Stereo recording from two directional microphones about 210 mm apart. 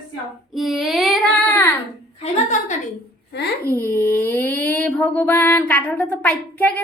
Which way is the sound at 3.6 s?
10° left (ahead or behind).